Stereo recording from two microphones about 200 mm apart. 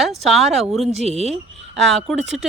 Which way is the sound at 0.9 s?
30° right (ahead or behind).